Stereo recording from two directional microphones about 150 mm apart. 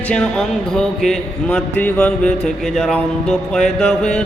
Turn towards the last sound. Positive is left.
turn(degrees=5)  # may be behind; listen again after turning